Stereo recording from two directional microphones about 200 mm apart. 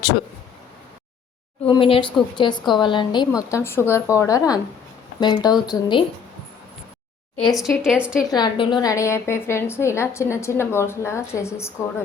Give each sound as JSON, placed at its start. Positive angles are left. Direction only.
{"t": 1.6, "sound": "a woman's voice", "side_deg": 25}
{"t": 7.4, "sound": "a woman's voice", "side_deg": 0}
{"t": 8.3, "sound": "a woman's voice", "side_deg": 20}